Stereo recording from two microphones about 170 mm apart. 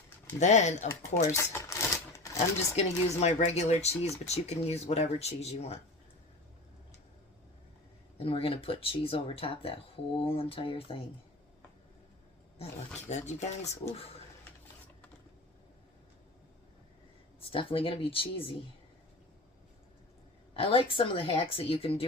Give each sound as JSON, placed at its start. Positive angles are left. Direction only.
{"t": 0.3, "sound": "speech", "side_deg": 45}
{"t": 1.3, "sound": "typewriter", "side_deg": 15}
{"t": 2.7, "sound": "speech", "side_deg": 40}
{"t": 8.2, "sound": "speech", "side_deg": 35}
{"t": 13.0, "sound": "speech", "side_deg": 45}
{"t": 17.5, "sound": "speech", "side_deg": 35}
{"t": 20.5, "sound": "speech", "side_deg": 35}